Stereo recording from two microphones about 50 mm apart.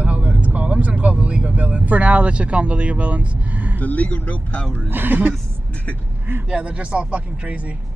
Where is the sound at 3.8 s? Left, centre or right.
Left.